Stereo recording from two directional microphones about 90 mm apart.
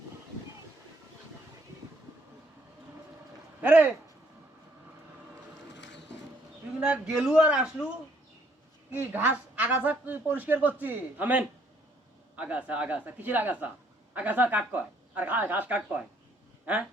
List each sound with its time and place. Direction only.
3.6 s a woman's voice: 15° right (ahead or behind)
6.7 s a woman's voice: 10° right (ahead or behind)
8.9 s a woman's voice: 25° right (ahead or behind)